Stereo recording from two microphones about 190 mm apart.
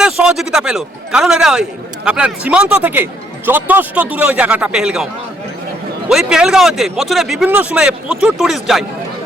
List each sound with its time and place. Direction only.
0.0 s a man's voice: 5° right (ahead or behind)
6.1 s speech: 5° right (ahead or behind)